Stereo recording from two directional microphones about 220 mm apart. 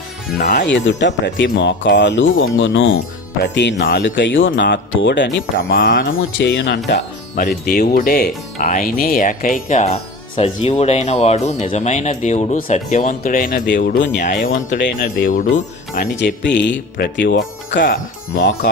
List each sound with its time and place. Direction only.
0.3 s speech: 50° left (ahead or behind)
3.4 s speech: 55° left (ahead or behind)
5.7 s speech: 40° left (ahead or behind)
14.8 s speech: 45° left (ahead or behind)
16.4 s speech: 55° left (ahead or behind)